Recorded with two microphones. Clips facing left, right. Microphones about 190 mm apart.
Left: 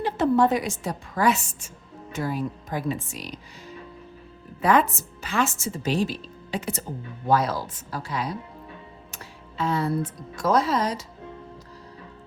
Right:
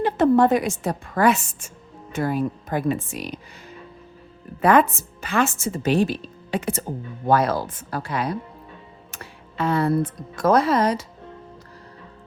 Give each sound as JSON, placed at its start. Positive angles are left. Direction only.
{"t": 0.0, "sound": "a woman's voice", "side_deg": -55}
{"t": 4.6, "sound": "a woman's voice", "side_deg": -55}